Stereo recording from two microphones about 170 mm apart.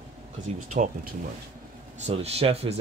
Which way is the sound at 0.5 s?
50° right (ahead or behind).